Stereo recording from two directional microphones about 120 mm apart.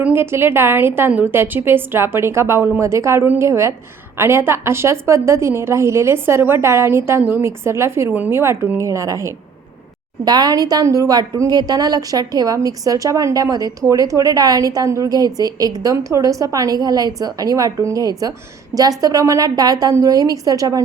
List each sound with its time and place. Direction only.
0.0 s a woman's voice: 20° right (ahead or behind)